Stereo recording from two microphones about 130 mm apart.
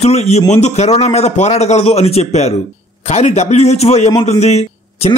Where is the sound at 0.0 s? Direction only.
55° left (ahead or behind).